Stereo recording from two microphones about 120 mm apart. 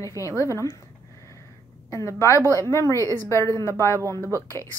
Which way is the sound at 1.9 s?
25° left (ahead or behind).